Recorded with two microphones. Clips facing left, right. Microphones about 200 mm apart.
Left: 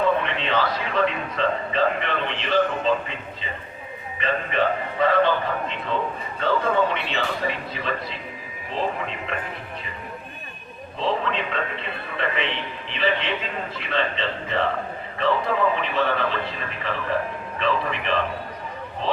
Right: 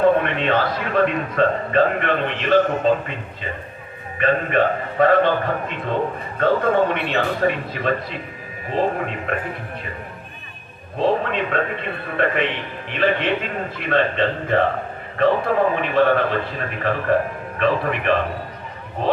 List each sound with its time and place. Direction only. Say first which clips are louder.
0.0 s a man's voice: right 6 dB; 50° right (ahead or behind)
4.2 s a man's voice: right 5 dB; 55° right (ahead or behind)
10.9 s a man's voice: right 5 dB; 50° right (ahead or behind)